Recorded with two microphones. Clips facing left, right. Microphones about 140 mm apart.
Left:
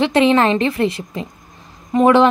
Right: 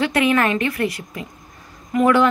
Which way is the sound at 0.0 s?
25° left (ahead or behind).